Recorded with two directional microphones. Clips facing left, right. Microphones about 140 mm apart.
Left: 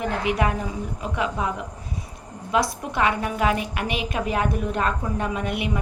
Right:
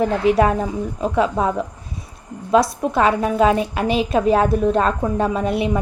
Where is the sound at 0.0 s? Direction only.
30° right (ahead or behind).